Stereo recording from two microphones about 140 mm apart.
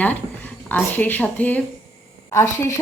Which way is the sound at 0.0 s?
10° left (ahead or behind).